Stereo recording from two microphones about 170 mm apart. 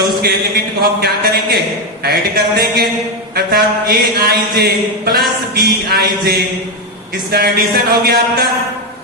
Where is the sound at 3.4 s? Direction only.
65° right (ahead or behind).